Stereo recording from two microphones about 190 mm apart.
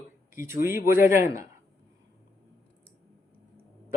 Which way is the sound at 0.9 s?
15° right (ahead or behind).